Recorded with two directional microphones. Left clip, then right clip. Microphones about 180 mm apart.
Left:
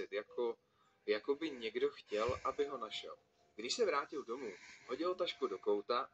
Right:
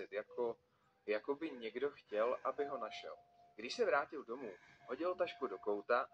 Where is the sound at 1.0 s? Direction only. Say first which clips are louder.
Left 3 dB; 20° left (ahead or behind).